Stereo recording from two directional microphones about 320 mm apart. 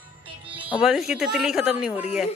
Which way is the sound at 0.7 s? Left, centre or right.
Centre.